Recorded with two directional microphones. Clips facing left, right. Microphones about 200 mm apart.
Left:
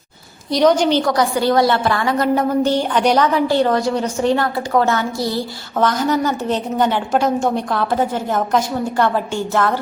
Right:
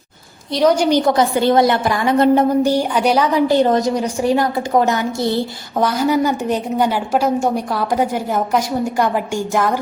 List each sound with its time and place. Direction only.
0.5 s a woman's voice: 5° right (ahead or behind)
1.0 s a woman's voice: 25° right (ahead or behind)
2.6 s a woman's voice: 10° right (ahead or behind)
5.8 s a woman's voice: 10° right (ahead or behind)